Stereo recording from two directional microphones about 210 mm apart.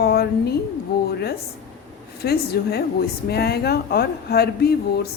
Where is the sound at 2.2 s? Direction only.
50° left (ahead or behind).